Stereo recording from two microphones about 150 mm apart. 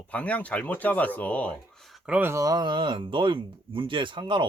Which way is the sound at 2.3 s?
25° right (ahead or behind).